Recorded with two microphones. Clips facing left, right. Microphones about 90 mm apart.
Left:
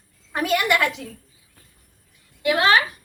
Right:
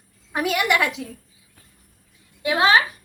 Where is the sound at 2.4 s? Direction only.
20° right (ahead or behind).